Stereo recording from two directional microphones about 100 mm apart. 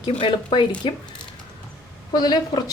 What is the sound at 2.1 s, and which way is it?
Speech, 45° left (ahead or behind).